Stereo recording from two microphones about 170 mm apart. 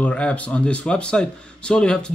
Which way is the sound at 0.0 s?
5° left (ahead or behind).